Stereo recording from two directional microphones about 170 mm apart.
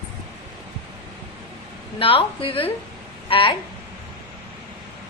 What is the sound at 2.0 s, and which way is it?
A woman's voice, 35° left (ahead or behind).